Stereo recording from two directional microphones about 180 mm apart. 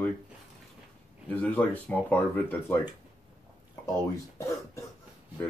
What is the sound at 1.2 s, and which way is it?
Speech, 10° left (ahead or behind).